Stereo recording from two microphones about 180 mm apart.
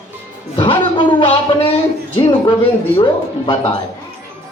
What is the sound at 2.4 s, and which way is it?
Speech, 25° left (ahead or behind).